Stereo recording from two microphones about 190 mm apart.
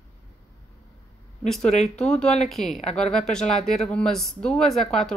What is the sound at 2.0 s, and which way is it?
Speech, 5° left (ahead or behind).